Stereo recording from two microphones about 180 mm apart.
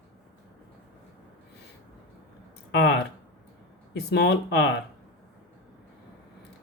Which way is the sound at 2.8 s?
70° left (ahead or behind).